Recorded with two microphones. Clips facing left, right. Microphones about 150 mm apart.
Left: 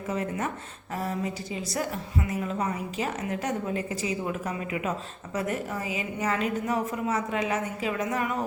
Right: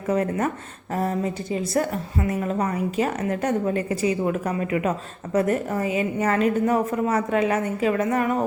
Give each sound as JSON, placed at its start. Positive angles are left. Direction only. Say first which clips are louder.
{"t": 0.1, "sound": "a woman's voice", "louder": "right 8 dB", "side_deg": -55}